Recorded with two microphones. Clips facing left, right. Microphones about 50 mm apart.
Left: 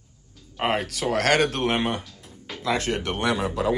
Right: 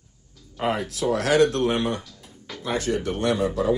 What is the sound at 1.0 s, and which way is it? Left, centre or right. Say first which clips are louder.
Speech: right 2 dB; left.